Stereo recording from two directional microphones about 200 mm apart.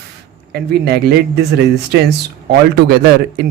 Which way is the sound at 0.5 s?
55° right (ahead or behind).